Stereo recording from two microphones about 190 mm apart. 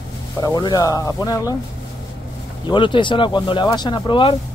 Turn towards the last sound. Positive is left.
turn(degrees=25)  # may be behind; listen again after turning